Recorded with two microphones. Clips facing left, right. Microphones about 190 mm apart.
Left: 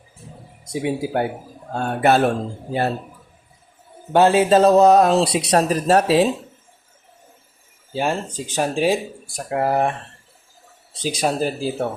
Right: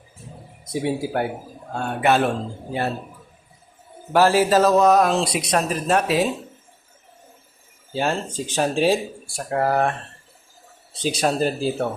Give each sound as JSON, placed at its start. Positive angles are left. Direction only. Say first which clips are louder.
{"t": 0.6, "sound": "speech", "louder": "left 1 dB", "side_deg": 15}
{"t": 1.7, "sound": "speech", "louder": "left 2 dB", "side_deg": 40}
{"t": 4.1, "sound": "speech", "louder": "left 2 dB", "side_deg": 25}
{"t": 7.9, "sound": "speech", "louder": "left 1 dB", "side_deg": 10}
{"t": 10.9, "sound": "speech", "louder": "even", "side_deg": 10}